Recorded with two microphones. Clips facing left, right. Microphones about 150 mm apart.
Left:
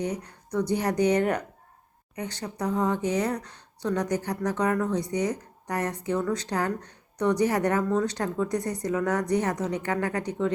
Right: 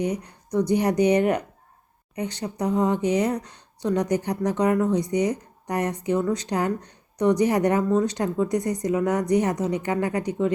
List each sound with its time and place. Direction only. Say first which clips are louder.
0.0 s speech: right 4 dB; 15° right (ahead or behind)